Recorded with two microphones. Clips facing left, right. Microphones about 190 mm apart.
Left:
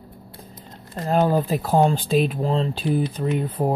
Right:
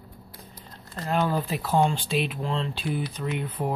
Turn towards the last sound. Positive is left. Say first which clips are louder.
# left 6 dB
turn(degrees=35)  # may be behind; listen again after turning